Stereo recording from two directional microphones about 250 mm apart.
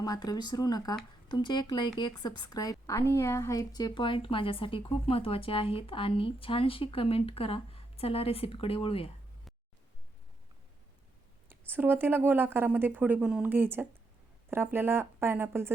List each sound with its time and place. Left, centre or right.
0.0 s a woman's voice: centre
11.4 s speech: centre